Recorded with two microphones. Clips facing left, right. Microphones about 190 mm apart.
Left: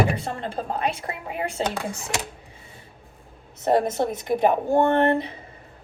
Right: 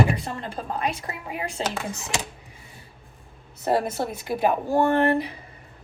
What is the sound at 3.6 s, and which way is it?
Speech, 20° left (ahead or behind).